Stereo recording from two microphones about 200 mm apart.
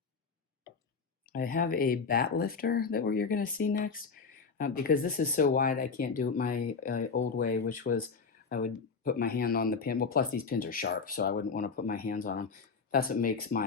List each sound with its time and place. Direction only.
1.3 s speech: 45° left (ahead or behind)